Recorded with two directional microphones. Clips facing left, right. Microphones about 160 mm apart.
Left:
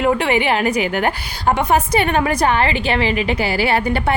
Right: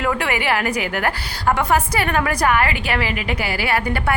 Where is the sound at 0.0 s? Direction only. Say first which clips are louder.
Left 5 dB; 25° left (ahead or behind).